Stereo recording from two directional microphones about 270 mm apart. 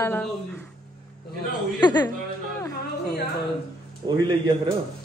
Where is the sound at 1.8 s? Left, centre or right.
Centre.